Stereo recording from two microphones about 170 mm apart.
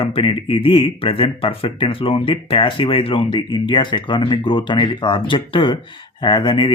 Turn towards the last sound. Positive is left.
turn(degrees=30)  # may be behind; listen again after turning